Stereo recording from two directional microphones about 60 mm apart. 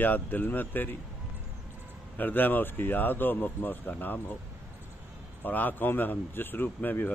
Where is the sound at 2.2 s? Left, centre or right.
Left.